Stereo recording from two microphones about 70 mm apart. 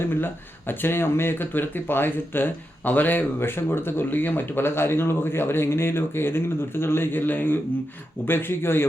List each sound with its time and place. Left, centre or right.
0.0 s speech: left